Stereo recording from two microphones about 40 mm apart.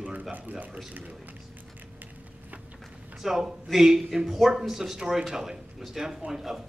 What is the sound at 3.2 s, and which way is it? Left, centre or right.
Speech, centre.